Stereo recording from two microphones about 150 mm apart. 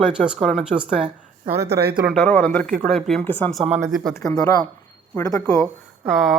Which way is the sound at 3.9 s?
Centre (ahead or behind).